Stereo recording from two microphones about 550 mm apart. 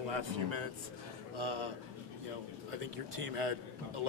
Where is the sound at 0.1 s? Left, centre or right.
Right.